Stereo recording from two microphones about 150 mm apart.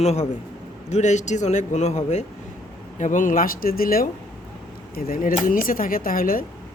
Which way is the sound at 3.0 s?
60° left (ahead or behind).